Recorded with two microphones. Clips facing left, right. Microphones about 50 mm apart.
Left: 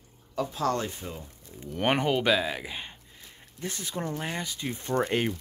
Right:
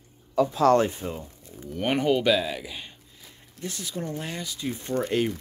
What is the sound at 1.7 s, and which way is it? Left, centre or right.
Speech, left.